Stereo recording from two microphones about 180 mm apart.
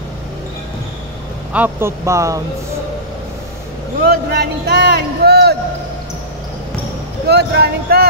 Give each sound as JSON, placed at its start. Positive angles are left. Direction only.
{"t": 1.5, "sound": "speech", "side_deg": -10}
{"t": 4.0, "sound": "speech", "side_deg": -60}
{"t": 5.2, "sound": "a sound", "side_deg": -65}
{"t": 7.2, "sound": "speech", "side_deg": -65}